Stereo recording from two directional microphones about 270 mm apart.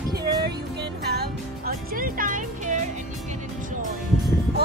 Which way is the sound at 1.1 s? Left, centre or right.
Right.